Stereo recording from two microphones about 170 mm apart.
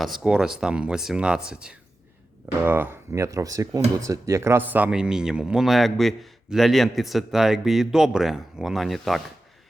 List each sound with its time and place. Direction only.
0.0 s speech: centre (ahead or behind)